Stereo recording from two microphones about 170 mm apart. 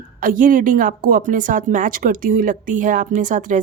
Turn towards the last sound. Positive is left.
turn(degrees=-45)  # may be behind; listen again after turning